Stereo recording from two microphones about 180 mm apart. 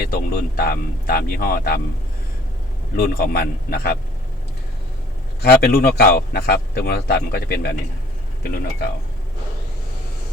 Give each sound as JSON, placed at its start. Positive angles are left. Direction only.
{"t": 0.0, "sound": "a man's voice", "side_deg": 55}
{"t": 2.9, "sound": "a man's voice", "side_deg": 60}
{"t": 5.4, "sound": "a man's voice", "side_deg": 60}